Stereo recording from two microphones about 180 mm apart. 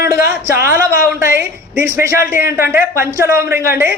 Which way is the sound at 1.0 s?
55° left (ahead or behind).